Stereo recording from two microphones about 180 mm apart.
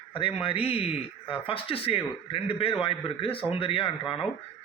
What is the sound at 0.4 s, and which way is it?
A man's voice, 30° left (ahead or behind).